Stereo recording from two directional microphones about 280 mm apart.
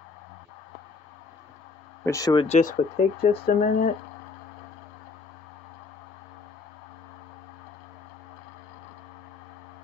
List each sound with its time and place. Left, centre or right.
2.0 s speech: centre; by 3.9 s left